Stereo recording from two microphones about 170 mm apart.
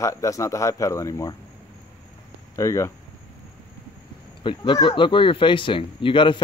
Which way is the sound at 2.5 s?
20° left (ahead or behind).